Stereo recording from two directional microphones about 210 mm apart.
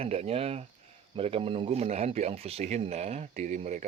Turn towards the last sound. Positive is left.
turn(degrees=-35)  # may be behind; listen again after turning